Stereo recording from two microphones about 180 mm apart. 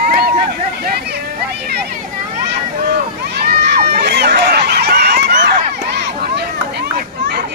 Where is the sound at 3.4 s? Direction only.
60° right (ahead or behind).